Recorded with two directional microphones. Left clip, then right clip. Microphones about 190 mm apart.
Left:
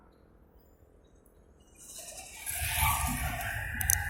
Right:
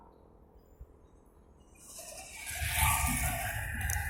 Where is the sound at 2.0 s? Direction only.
Centre (ahead or behind).